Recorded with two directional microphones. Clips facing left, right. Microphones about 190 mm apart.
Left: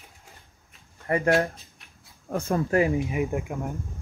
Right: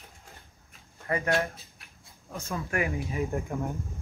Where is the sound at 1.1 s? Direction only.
30° left (ahead or behind).